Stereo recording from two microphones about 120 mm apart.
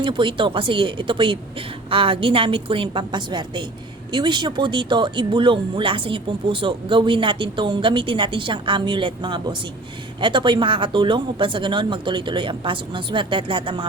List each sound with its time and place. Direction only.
0.0 s speech: 45° right (ahead or behind)